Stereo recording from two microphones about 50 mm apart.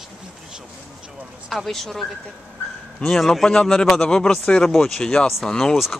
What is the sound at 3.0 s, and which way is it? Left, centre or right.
Speech, centre.